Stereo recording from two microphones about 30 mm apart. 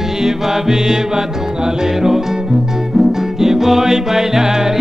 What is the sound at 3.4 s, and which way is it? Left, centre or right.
Music, centre.